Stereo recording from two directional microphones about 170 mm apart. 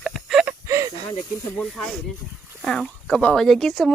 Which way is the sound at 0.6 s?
15° right (ahead or behind).